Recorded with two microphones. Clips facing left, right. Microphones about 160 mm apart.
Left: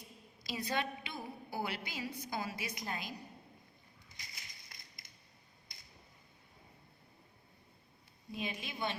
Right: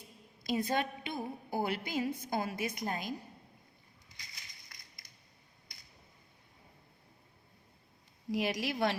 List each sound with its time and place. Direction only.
0.4 s a woman's voice: 50° right (ahead or behind)
4.7 s a sound: 25° left (ahead or behind)
8.3 s a woman's voice: 85° right